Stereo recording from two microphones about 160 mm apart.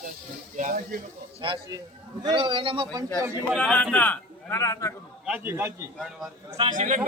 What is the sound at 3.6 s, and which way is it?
A man's voice, 10° left (ahead or behind).